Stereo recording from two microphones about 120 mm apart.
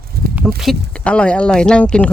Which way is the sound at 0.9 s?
10° left (ahead or behind).